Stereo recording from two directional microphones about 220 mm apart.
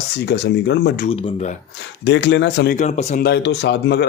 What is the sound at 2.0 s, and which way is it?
Speech, 55° left (ahead or behind).